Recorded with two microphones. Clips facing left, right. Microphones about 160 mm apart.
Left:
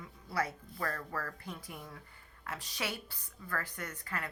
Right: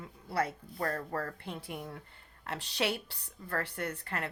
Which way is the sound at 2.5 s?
75° right (ahead or behind).